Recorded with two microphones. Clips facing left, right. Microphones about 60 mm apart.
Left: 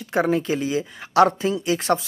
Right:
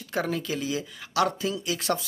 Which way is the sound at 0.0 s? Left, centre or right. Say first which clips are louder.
Left 8 dB; left.